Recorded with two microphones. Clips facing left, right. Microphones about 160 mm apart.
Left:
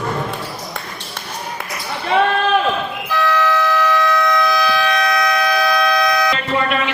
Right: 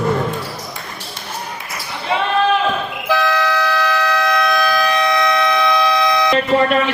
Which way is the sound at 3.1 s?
90° right.